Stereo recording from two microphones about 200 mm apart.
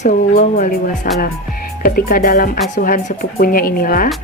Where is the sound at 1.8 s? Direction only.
45° left (ahead or behind).